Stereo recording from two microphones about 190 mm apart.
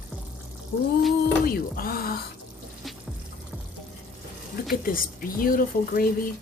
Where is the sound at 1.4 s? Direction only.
50° left (ahead or behind).